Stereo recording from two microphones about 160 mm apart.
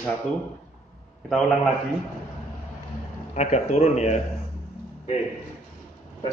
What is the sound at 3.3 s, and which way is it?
Speech, 45° left (ahead or behind).